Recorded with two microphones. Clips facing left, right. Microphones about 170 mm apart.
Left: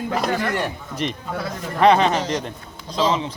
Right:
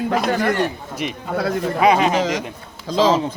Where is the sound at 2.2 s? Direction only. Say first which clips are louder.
Right 4 dB; 90° right.